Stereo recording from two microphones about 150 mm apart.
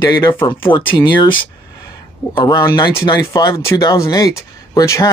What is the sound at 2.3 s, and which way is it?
Speech, 25° left (ahead or behind).